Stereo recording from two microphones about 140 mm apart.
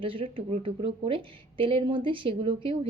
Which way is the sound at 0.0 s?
40° right (ahead or behind).